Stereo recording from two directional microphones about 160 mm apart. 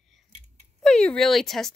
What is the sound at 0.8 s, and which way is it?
Speech, 5° left (ahead or behind).